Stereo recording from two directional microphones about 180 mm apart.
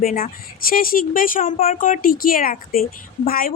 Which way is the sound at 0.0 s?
45° left (ahead or behind).